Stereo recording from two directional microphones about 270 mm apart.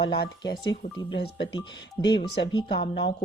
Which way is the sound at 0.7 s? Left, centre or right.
Left.